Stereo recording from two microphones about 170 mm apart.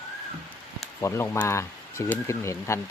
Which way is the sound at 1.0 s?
15° left (ahead or behind).